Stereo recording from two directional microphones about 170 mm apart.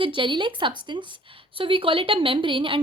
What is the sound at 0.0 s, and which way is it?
Speech, 30° right (ahead or behind).